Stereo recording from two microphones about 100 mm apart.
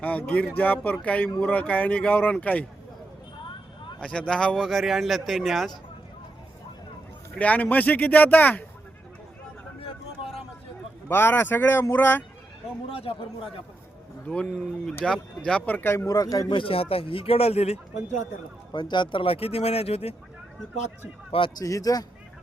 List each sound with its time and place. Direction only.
0.0 s speech: 15° left (ahead or behind)
4.0 s speech: 10° left (ahead or behind)
7.3 s speech: 15° left (ahead or behind)
11.1 s speech: 20° left (ahead or behind)
12.9 s a man's voice: 70° left (ahead or behind)
14.3 s speech: 10° left (ahead or behind); by 16.1 s 25° left (ahead or behind)
16.1 s speech: 35° left (ahead or behind)
16.6 s speech: 65° left (ahead or behind); by 17.7 s 90° left
18.7 s speech: 50° left (ahead or behind); by 20.1 s 90° left
21.6 s speech: 35° left (ahead or behind)